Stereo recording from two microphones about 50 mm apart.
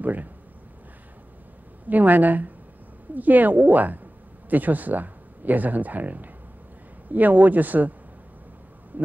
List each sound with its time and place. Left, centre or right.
0.0 s speech: right
1.9 s speech: right
8.9 s heart sounds: right